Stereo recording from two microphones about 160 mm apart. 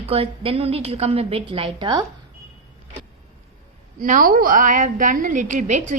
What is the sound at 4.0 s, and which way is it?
A woman's voice, 60° right (ahead or behind).